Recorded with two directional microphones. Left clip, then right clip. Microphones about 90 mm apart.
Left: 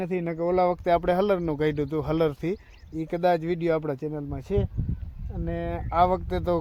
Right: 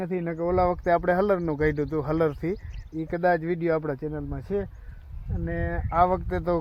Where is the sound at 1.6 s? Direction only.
15° left (ahead or behind).